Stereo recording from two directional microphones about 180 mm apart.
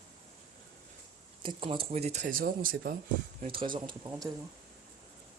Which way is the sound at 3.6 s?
25° right (ahead or behind).